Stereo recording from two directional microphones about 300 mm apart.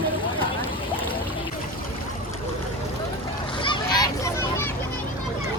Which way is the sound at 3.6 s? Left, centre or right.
Centre.